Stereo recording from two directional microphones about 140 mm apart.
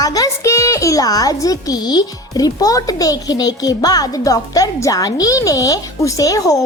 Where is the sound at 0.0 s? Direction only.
25° left (ahead or behind).